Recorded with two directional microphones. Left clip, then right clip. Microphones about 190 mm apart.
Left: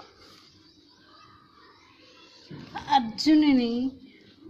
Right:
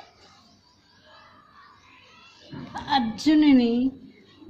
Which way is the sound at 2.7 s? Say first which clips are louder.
Left 1 dB; 15° left (ahead or behind).